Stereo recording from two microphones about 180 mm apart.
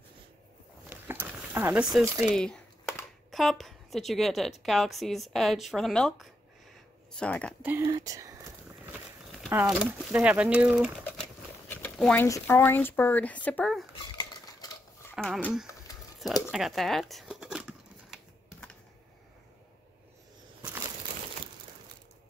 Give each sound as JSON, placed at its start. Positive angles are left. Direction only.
{"t": 0.8, "sound": "a sound", "side_deg": -10}
{"t": 3.3, "sound": "a woman's voice", "side_deg": 0}
{"t": 7.6, "sound": "speech", "side_deg": -10}
{"t": 9.5, "sound": "speech", "side_deg": -10}
{"t": 11.7, "sound": "a sound", "side_deg": 10}
{"t": 12.3, "sound": "speech", "side_deg": 15}
{"t": 13.9, "sound": "cutlery", "side_deg": 20}
{"t": 15.1, "sound": "a woman's voice", "side_deg": 5}
{"t": 16.4, "sound": "scissors", "side_deg": 0}